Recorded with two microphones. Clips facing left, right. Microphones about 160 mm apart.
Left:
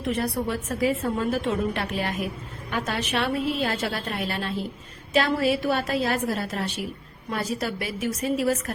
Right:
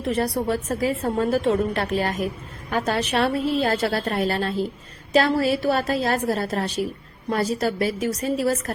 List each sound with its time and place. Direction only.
0.0 s a woman's voice: 40° right (ahead or behind)